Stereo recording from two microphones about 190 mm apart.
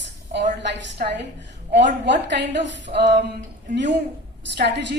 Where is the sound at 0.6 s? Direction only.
65° right (ahead or behind).